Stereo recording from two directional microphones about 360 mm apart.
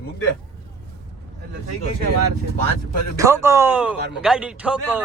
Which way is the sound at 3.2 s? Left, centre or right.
Centre.